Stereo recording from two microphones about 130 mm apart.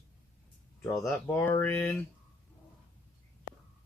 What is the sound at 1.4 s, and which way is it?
Speech, 15° left (ahead or behind).